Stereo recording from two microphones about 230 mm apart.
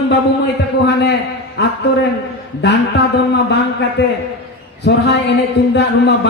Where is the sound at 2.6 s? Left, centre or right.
Left.